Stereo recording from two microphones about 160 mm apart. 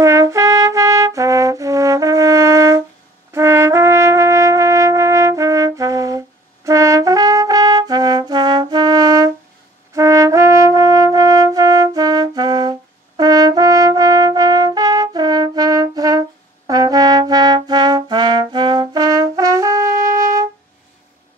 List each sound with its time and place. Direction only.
0.0 s trumpet: 20° right (ahead or behind)
9.9 s brass instrument: 20° right (ahead or behind)